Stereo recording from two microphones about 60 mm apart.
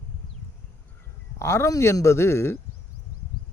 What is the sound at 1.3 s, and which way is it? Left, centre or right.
A man's voice, left.